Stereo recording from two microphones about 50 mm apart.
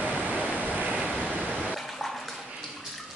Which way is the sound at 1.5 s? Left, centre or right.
Centre.